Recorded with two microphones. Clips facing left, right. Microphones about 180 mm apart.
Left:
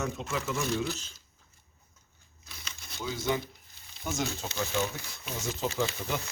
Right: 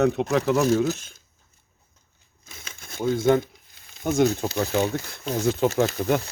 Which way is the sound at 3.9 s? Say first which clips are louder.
Right 13 dB; 50° right (ahead or behind).